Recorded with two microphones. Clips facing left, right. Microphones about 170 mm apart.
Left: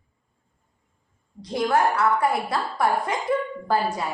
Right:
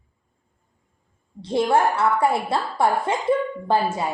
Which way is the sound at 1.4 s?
25° right (ahead or behind).